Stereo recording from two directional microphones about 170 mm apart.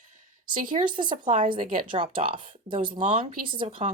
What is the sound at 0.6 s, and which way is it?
Speech, 55° right (ahead or behind).